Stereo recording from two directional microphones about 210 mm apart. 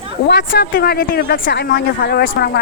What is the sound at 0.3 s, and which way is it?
Speech, 50° left (ahead or behind).